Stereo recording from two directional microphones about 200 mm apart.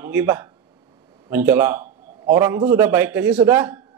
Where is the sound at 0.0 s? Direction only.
10° right (ahead or behind).